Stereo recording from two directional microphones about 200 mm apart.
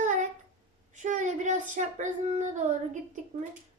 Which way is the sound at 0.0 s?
40° right (ahead or behind).